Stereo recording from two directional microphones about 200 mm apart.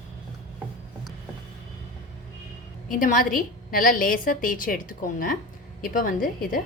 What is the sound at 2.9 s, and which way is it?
A woman's voice, 45° left (ahead or behind).